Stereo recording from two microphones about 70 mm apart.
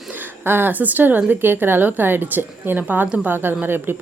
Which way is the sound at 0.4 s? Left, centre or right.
Right.